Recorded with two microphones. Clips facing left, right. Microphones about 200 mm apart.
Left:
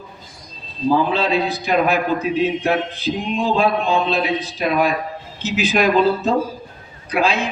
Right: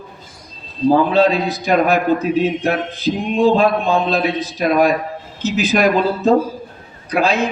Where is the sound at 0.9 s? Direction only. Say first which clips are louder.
Right 5 dB; 45° right (ahead or behind).